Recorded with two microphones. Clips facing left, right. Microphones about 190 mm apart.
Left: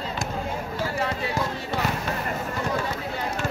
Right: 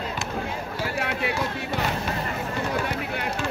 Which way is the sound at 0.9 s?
70° right (ahead or behind).